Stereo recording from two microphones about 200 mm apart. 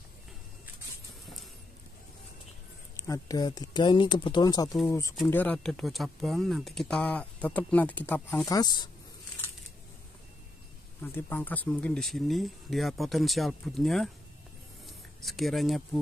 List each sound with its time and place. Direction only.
3.0 s speech: 15° left (ahead or behind)
11.0 s speech: 10° left (ahead or behind)
15.2 s speech: centre (ahead or behind)